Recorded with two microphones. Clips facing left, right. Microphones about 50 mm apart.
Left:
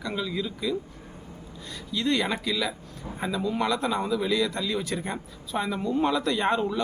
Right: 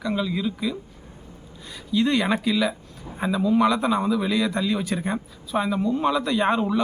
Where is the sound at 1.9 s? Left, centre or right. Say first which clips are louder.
Right 5 dB; centre.